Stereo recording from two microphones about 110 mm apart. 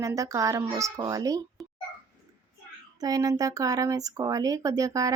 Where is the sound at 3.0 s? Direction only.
35° right (ahead or behind).